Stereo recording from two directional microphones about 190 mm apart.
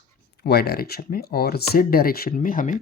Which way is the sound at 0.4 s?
55° left (ahead or behind).